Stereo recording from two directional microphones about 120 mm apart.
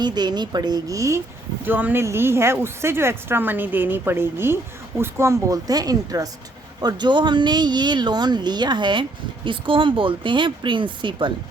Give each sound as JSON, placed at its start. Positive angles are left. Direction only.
{"t": 0.0, "sound": "speech", "side_deg": -35}
{"t": 1.6, "sound": "speech", "side_deg": -15}